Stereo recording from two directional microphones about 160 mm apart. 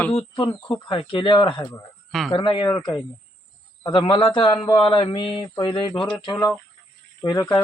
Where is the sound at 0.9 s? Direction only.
30° left (ahead or behind).